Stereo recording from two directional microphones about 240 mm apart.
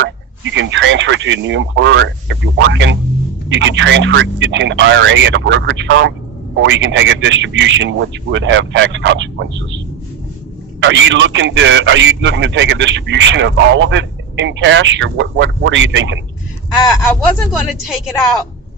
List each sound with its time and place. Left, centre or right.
0.5 s a man's voice: right
10.8 s a man's voice: right
17.7 s a woman's voice: centre